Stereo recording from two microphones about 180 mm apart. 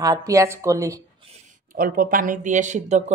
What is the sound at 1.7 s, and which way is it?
Speech, 50° right (ahead or behind).